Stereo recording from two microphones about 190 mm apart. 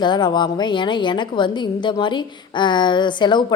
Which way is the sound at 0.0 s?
25° left (ahead or behind).